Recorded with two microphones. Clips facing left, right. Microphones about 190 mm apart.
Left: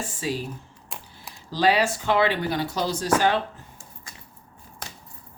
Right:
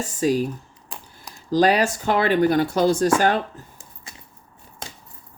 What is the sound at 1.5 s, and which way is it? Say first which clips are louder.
Speech: right 4 dB; 45° right (ahead or behind).